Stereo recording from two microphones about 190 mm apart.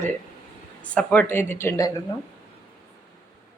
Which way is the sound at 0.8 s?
5° left (ahead or behind).